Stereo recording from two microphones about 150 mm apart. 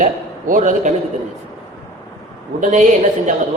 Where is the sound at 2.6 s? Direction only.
55° right (ahead or behind).